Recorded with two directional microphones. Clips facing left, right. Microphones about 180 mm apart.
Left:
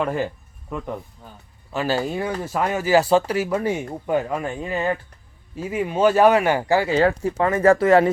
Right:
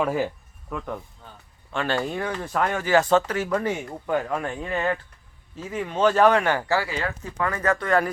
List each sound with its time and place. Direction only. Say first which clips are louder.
0.0 s speech: even; 5° right (ahead or behind)
0.7 s a man's voice: left 2 dB; 10° left (ahead or behind)
6.9 s speech: left 11 dB; 35° left (ahead or behind)